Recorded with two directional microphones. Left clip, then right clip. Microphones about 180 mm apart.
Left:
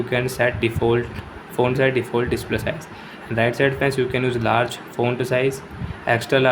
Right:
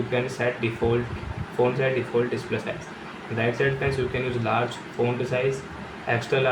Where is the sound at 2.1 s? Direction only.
70° left (ahead or behind).